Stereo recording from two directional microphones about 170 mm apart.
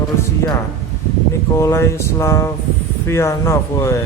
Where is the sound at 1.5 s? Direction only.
15° left (ahead or behind).